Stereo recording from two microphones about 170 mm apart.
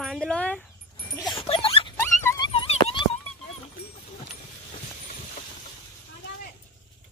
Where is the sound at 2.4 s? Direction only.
35° left (ahead or behind).